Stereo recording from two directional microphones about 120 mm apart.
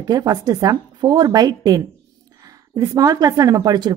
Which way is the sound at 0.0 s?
30° right (ahead or behind).